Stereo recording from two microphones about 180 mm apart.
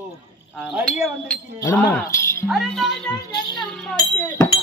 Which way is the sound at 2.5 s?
Centre (ahead or behind).